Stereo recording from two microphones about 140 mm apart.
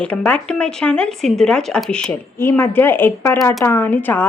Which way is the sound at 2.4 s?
15° left (ahead or behind).